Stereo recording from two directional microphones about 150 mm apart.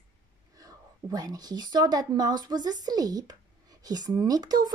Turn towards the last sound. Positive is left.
turn(degrees=-25)  # may be behind; listen again after turning